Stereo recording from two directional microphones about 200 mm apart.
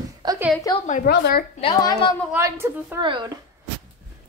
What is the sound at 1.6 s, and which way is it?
Speech, 20° left (ahead or behind).